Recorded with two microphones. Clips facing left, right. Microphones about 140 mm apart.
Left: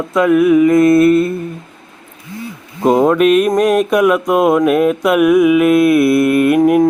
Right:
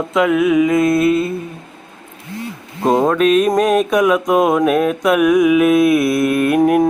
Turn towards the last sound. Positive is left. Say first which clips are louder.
# left 3 dB
turn(degrees=0)  # may be behind; listen again after turning